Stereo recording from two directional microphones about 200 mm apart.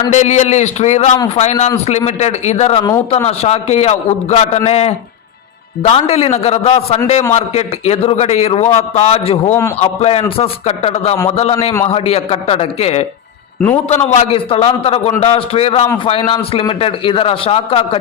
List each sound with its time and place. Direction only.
0.1 s a man's voice: 35° left (ahead or behind)